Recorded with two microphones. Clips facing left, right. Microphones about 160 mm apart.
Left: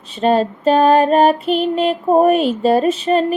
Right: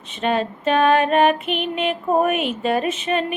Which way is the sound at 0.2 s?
35° left (ahead or behind).